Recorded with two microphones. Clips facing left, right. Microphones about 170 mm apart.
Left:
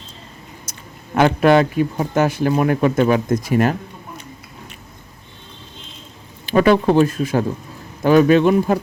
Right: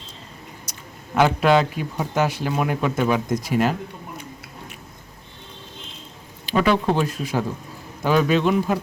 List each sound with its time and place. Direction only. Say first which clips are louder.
0.6 s speech: left 1 dB; 50° left (ahead or behind)
6.4 s speech: left 6 dB; 50° left (ahead or behind)